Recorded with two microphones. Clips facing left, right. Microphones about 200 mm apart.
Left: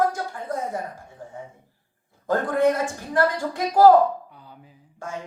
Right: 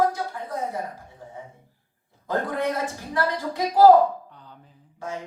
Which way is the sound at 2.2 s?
50° left (ahead or behind).